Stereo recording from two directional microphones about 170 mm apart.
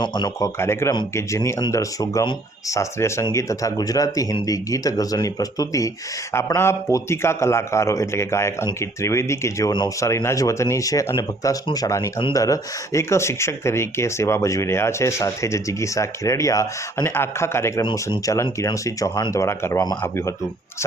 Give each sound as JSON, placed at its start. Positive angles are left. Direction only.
{"t": 0.0, "sound": "a man's voice", "side_deg": 25}